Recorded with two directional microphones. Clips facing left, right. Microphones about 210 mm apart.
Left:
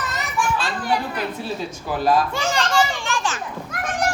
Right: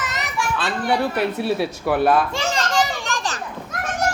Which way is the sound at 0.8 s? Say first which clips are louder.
Right 6 dB; 70° right (ahead or behind).